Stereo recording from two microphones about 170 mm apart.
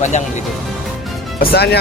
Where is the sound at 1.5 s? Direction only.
75° left (ahead or behind).